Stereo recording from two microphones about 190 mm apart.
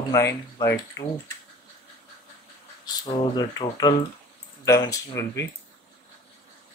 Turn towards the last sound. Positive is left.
turn(degrees=15)  # may be behind; listen again after turning